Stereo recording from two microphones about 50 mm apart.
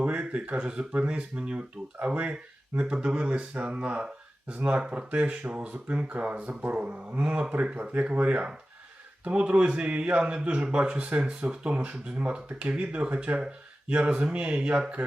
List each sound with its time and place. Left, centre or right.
0.0 s a man's voice: right
2.7 s a man's voice: right